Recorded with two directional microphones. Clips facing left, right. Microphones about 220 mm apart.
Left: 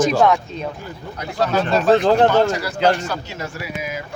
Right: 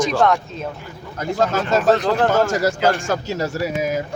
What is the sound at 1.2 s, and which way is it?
A man's voice, 45° right (ahead or behind).